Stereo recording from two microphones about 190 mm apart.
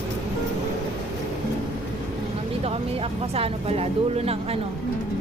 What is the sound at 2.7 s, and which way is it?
Speech, 30° right (ahead or behind).